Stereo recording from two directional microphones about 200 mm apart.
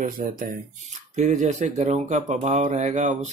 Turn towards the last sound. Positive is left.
turn(degrees=-35)  # may be behind; listen again after turning